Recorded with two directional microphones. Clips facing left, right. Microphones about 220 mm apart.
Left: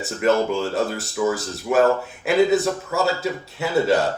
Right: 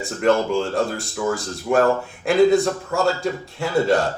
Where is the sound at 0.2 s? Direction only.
5° left (ahead or behind).